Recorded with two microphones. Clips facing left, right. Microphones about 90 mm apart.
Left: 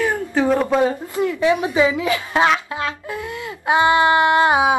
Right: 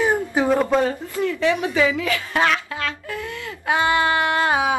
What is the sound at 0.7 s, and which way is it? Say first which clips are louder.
A woman's voice: left 2 dB; 15° left (ahead or behind).